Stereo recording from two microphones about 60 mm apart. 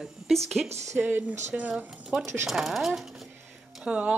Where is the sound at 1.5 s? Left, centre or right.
Centre.